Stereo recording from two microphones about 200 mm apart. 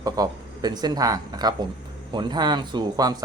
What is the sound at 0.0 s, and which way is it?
Speech, 20° right (ahead or behind).